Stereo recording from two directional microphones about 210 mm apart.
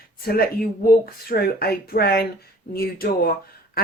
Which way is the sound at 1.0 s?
45° left (ahead or behind).